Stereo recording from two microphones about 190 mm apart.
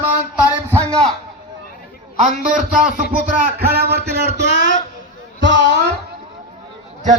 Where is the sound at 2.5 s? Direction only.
45° right (ahead or behind); by 5.8 s 70° right (ahead or behind).